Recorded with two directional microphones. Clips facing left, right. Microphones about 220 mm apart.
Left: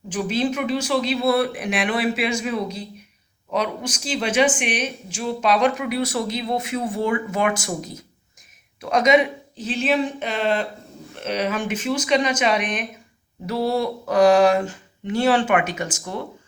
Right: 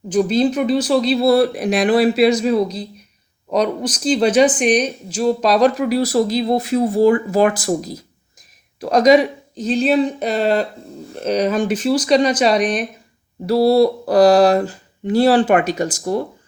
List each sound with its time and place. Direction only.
0.1 s speech: 35° right (ahead or behind)